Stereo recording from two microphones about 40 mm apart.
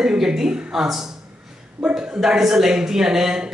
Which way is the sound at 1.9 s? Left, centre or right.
Centre.